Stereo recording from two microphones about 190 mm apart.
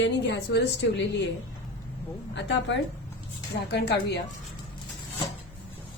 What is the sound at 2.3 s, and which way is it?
A woman's voice, 70° left (ahead or behind).